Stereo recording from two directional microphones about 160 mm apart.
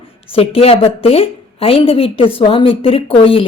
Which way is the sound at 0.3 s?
35° left (ahead or behind).